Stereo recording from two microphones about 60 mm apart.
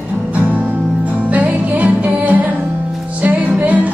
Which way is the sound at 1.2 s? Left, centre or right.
Right.